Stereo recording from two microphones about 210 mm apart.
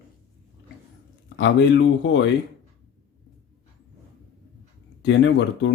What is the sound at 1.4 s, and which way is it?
Speech, 60° left (ahead or behind).